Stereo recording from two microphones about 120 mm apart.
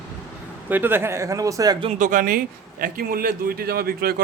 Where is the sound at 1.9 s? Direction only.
90° right.